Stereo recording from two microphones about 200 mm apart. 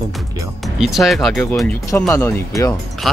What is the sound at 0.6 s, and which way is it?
Speech, centre (ahead or behind).